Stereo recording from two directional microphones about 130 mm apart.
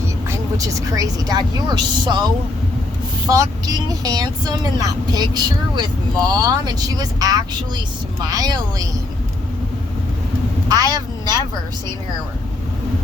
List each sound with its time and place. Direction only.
0.3 s a woman's voice: 25° right (ahead or behind)
10.7 s a woman's voice: 30° right (ahead or behind)